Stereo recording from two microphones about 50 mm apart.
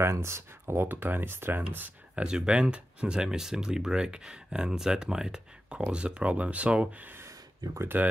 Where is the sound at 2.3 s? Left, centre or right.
Centre.